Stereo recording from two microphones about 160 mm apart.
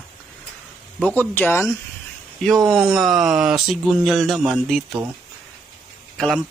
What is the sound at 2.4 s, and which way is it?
Speech, centre (ahead or behind).